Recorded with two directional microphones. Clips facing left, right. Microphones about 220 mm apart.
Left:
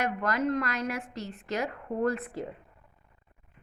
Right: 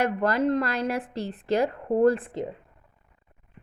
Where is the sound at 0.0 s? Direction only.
30° right (ahead or behind).